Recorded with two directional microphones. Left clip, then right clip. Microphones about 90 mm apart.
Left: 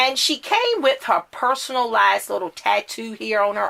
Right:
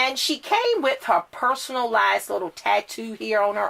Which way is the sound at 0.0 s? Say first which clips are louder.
Left 4 dB; 30° left (ahead or behind).